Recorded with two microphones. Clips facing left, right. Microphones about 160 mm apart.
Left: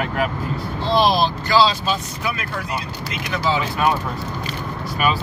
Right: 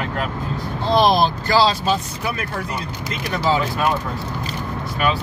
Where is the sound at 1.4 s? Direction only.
50° right (ahead or behind).